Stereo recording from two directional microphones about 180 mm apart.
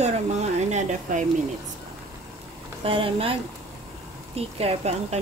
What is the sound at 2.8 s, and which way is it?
Speech, 30° right (ahead or behind).